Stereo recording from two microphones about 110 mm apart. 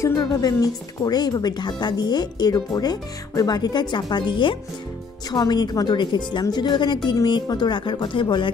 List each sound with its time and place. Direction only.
0.0 s speech: 35° left (ahead or behind)